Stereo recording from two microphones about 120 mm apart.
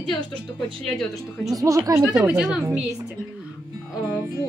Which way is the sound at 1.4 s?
25° right (ahead or behind).